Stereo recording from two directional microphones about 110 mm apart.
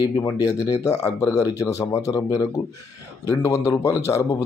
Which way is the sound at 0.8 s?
25° left (ahead or behind).